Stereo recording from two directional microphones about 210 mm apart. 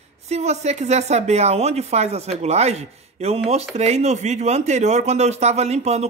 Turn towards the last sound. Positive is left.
turn(degrees=-30)  # may be behind; listen again after turning